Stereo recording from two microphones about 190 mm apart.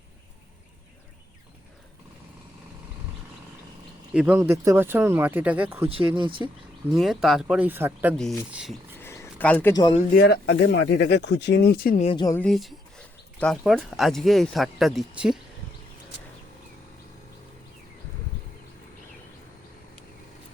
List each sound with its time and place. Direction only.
4.1 s speech: 5° right (ahead or behind)
5.9 s speech: 25° right (ahead or behind)
6.9 s speech: centre (ahead or behind)
8.1 s speech: centre (ahead or behind)
9.0 s a sound: 15° left (ahead or behind)
9.7 s speech: 25° left (ahead or behind)
10.2 s speech: 60° left (ahead or behind)
12.0 s speech: 25° left (ahead or behind)
12.3 s speech: 5° left (ahead or behind)